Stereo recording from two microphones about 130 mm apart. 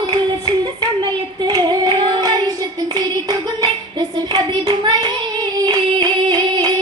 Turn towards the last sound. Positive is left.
turn(degrees=-30)  # may be behind; listen again after turning